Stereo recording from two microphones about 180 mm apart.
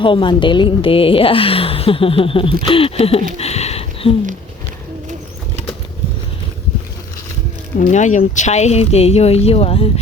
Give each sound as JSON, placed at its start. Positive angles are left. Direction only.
{"t": 0.0, "sound": "a woman's voice", "side_deg": 25}
{"t": 7.8, "sound": "a woman's voice", "side_deg": 40}